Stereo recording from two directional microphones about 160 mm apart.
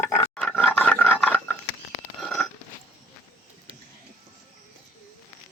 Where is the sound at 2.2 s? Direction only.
5° left (ahead or behind).